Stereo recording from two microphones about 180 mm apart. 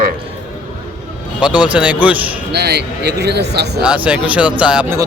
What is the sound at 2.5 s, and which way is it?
Speech, 65° right (ahead or behind).